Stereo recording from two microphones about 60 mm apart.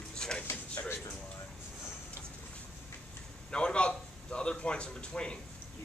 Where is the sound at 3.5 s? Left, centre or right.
Centre.